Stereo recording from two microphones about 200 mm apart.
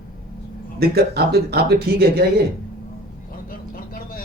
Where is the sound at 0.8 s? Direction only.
50° right (ahead or behind).